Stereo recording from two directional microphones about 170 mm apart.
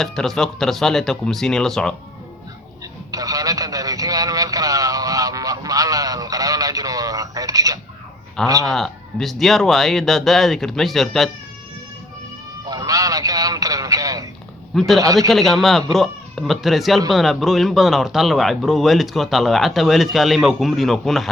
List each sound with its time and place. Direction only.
0.0 s speech: centre (ahead or behind)
3.1 s a sound: 20° right (ahead or behind)
8.4 s a man's voice: 20° right (ahead or behind)
8.7 s speech: centre (ahead or behind)
12.6 s a sound: 20° right (ahead or behind)
14.8 s speech: centre (ahead or behind)
15.0 s a man's voice: 20° right (ahead or behind)
15.3 s speech: centre (ahead or behind)